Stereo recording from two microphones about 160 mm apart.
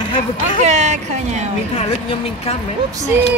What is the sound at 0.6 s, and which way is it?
Speech, 45° right (ahead or behind).